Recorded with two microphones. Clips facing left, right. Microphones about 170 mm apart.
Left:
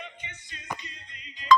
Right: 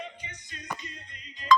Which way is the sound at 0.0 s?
35° right (ahead or behind).